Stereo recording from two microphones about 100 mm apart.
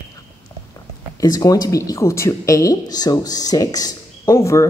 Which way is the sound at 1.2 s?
40° left (ahead or behind).